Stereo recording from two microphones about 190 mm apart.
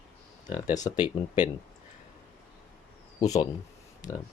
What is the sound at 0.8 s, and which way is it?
Speech, 20° left (ahead or behind).